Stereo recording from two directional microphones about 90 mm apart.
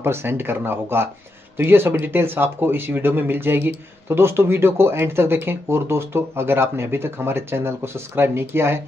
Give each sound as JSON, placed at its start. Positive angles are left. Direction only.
{"t": 0.0, "sound": "speech", "side_deg": -25}